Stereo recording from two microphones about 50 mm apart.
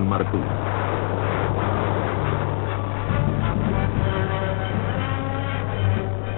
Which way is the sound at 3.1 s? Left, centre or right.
Right.